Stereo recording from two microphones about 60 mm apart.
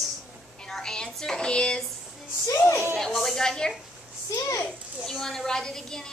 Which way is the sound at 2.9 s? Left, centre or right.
Centre.